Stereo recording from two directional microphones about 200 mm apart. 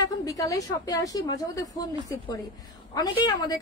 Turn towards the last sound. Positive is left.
turn(degrees=20)  # may be behind; listen again after turning